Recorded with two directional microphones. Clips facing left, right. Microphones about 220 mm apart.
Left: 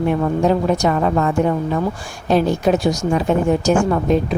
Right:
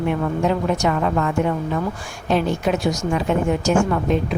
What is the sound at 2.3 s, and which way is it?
Speech, 40° left (ahead or behind).